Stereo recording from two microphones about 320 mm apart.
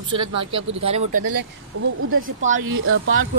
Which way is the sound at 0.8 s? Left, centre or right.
Centre.